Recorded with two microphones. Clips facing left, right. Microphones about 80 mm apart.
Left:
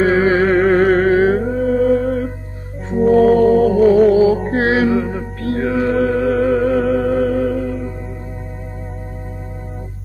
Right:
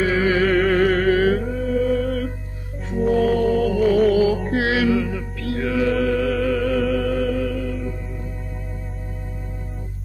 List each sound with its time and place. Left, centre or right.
0.0 s music: left